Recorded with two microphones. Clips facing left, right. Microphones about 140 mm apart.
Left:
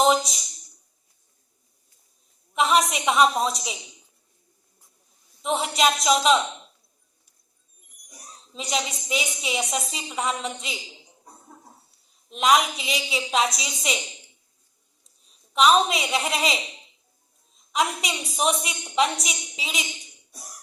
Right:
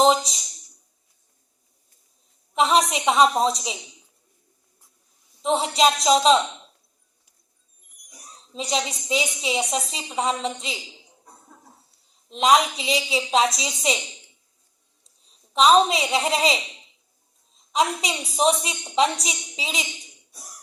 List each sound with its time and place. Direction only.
2.6 s a woman's voice: 30° right (ahead or behind)
5.4 s a woman's voice: 30° right (ahead or behind)
8.5 s a woman's voice: 25° right (ahead or behind)
12.3 s a woman's voice: 30° right (ahead or behind)
15.5 s a woman's voice: 30° right (ahead or behind)
17.7 s a woman's voice: 30° right (ahead or behind)